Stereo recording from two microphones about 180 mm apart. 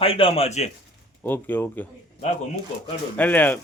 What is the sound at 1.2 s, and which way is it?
Speech, 10° left (ahead or behind).